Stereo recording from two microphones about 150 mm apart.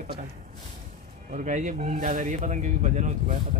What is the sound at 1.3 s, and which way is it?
A man's voice, 55° right (ahead or behind).